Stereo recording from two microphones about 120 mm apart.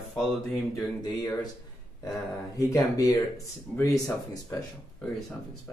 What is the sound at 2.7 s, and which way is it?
Speech, 30° left (ahead or behind).